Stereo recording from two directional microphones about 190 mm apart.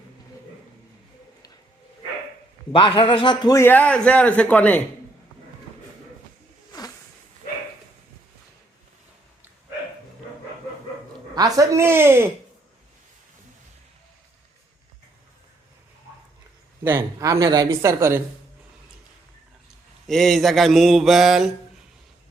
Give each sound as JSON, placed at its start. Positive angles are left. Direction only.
{"t": 2.7, "sound": "a man's voice", "side_deg": 30}
{"t": 6.7, "sound": "a sound", "side_deg": 20}
{"t": 11.3, "sound": "speech", "side_deg": -20}
{"t": 16.8, "sound": "speech", "side_deg": -15}
{"t": 20.1, "sound": "mantra", "side_deg": 0}